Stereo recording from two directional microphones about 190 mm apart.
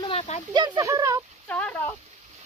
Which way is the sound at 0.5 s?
20° right (ahead or behind).